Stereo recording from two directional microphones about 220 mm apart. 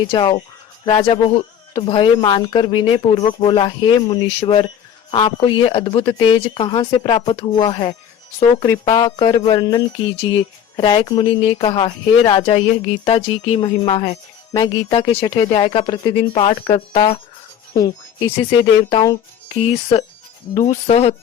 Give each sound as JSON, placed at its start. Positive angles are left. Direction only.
{"t": 0.1, "sound": "speech", "side_deg": 20}